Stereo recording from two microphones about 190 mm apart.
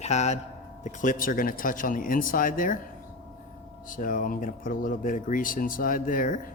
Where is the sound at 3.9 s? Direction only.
45° left (ahead or behind).